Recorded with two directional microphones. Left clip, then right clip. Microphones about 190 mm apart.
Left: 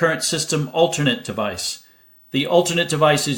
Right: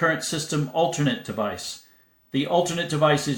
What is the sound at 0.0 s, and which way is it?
Speech, 35° left (ahead or behind).